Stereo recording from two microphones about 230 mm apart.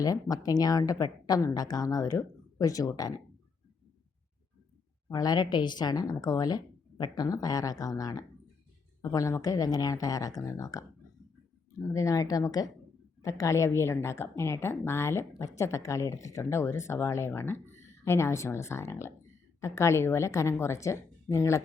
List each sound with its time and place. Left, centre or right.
0.0 s speech: centre
5.0 s speech: centre
11.9 s speech: centre